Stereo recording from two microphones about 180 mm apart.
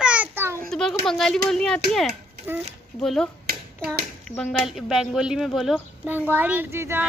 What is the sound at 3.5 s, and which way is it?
Hands, 60° right (ahead or behind).